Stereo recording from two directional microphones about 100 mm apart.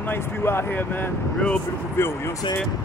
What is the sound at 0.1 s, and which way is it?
Speech, 20° left (ahead or behind).